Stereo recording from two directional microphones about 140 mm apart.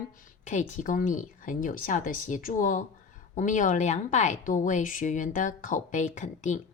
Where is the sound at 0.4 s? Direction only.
65° left (ahead or behind).